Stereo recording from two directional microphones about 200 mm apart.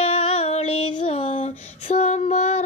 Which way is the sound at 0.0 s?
30° left (ahead or behind).